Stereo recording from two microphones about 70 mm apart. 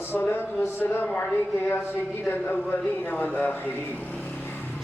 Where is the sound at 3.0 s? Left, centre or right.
Left.